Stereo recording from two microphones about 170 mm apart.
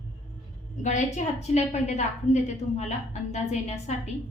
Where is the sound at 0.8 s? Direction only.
45° left (ahead or behind).